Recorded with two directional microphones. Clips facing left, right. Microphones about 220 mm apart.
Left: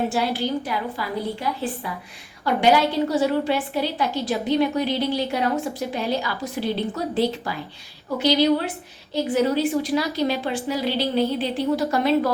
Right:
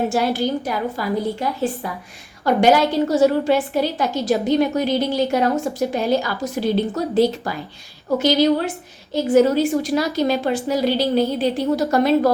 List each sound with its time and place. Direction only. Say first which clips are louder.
0.1 s a woman's voice: right 4 dB; 45° right (ahead or behind)